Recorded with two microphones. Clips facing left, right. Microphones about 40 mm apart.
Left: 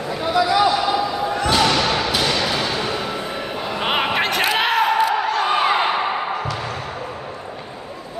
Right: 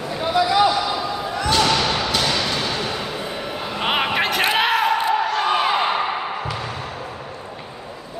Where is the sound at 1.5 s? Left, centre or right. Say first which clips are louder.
Even; centre.